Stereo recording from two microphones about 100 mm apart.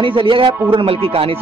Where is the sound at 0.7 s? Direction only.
70° right (ahead or behind).